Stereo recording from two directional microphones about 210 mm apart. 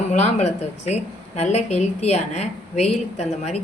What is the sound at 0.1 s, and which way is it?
A woman's voice, 30° left (ahead or behind).